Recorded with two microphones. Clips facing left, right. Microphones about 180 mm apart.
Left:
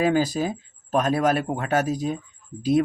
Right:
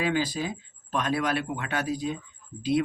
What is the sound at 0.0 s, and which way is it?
Speech, 40° left (ahead or behind).